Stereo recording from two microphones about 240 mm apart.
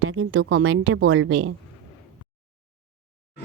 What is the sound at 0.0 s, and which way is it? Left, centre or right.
A woman's voice, right.